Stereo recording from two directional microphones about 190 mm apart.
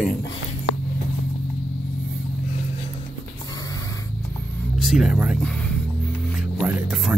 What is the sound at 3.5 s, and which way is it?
Snort, 20° left (ahead or behind).